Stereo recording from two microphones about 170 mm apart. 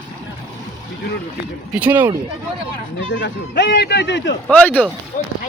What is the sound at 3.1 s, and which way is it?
Speech, 85° left.